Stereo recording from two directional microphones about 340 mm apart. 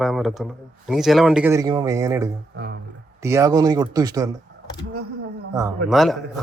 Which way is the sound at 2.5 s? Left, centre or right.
Right.